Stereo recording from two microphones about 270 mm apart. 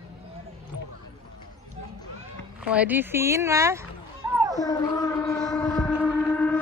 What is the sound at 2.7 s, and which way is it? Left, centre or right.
Speech, centre.